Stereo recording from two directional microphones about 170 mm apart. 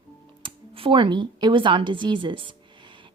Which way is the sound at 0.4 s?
30° right (ahead or behind).